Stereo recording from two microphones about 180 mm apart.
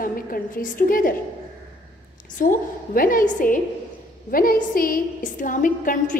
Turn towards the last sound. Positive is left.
turn(degrees=45)  # may be behind; listen again after turning